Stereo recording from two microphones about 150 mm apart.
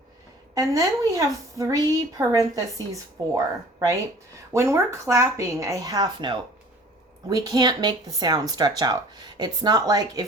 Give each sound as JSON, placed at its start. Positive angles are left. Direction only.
{"t": 0.5, "sound": "a woman's voice", "side_deg": -20}